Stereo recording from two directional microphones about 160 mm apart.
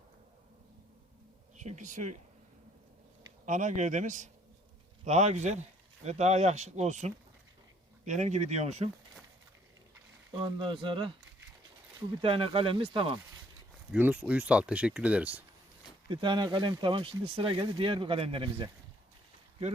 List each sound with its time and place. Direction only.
1.5 s speech: 50° right (ahead or behind)
3.4 s speech: 50° right (ahead or behind)
10.3 s speech: 30° right (ahead or behind)
13.9 s speech: 10° right (ahead or behind)
16.0 s speech: 30° right (ahead or behind)